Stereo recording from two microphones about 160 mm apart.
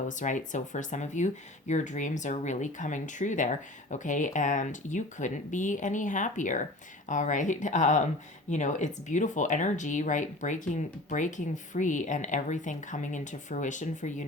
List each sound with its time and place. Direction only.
0.1 s speech: 50° left (ahead or behind)